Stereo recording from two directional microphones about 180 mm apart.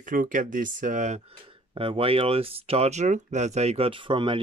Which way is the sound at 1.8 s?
30° right (ahead or behind).